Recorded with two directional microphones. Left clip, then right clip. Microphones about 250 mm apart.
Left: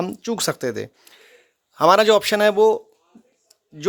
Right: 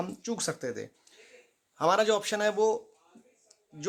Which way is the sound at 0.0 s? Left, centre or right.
Left.